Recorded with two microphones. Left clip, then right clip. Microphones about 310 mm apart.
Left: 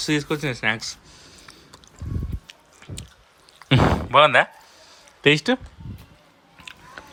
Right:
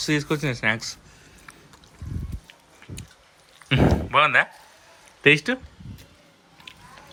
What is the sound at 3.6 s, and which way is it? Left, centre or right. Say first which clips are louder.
A man's voice: left 2 dB; centre.